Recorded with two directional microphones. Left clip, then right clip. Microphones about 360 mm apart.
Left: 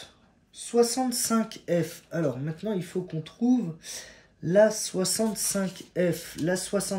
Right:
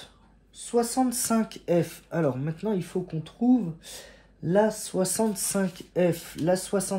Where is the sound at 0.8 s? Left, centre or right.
Right.